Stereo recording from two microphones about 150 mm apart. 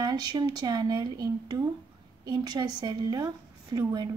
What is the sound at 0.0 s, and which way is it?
Speech, 25° right (ahead or behind).